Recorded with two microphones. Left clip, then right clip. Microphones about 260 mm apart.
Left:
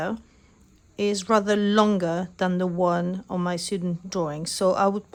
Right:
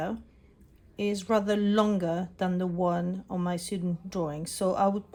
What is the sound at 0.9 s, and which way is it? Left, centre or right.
Speech, left.